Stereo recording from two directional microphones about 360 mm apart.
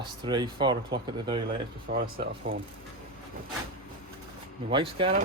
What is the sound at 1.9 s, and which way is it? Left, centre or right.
Speech, right.